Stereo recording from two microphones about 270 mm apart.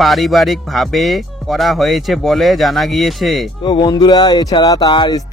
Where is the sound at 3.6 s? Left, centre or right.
Centre.